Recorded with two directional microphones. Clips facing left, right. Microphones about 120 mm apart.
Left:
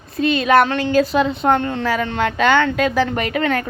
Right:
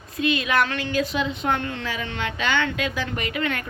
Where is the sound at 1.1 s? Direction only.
40° left (ahead or behind).